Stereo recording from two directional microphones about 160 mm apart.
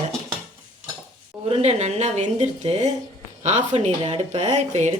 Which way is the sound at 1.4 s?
40° right (ahead or behind).